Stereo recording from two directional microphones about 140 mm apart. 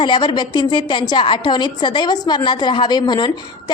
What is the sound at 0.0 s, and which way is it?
Speech, 35° left (ahead or behind).